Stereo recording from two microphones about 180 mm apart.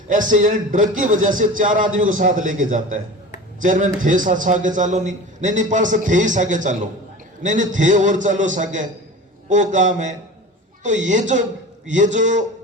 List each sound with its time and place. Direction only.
0.1 s a man's voice: 45° right (ahead or behind)